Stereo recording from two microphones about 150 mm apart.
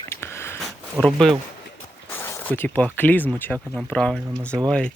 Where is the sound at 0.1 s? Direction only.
15° left (ahead or behind).